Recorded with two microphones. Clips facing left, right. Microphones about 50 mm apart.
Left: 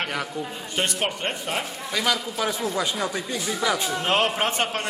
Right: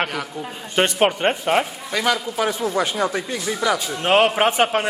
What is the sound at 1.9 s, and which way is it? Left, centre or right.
Speech, centre.